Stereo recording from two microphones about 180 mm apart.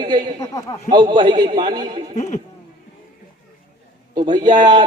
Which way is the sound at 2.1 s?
40° left (ahead or behind).